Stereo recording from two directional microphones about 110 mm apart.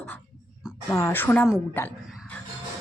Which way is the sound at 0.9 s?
20° left (ahead or behind).